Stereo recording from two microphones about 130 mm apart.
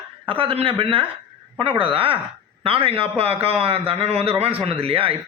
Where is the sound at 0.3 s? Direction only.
45° right (ahead or behind).